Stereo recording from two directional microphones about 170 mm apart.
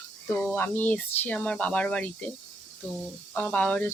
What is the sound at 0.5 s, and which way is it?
Speech, 10° left (ahead or behind).